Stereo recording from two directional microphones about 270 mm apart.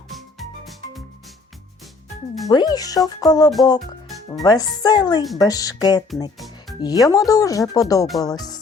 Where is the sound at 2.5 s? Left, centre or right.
Centre.